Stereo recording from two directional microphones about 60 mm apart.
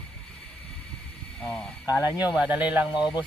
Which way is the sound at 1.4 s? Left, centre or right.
Centre.